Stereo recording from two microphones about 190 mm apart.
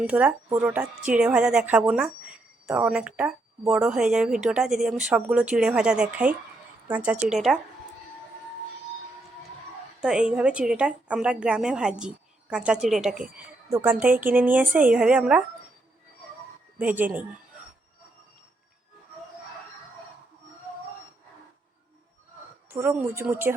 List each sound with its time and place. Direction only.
0.0 s a woman's voice: 5° right (ahead or behind)
10.0 s a woman's voice: 5° right (ahead or behind)
13.3 s speech: 15° right (ahead or behind)
16.7 s speech: 10° right (ahead or behind)
22.7 s speech: 10° right (ahead or behind)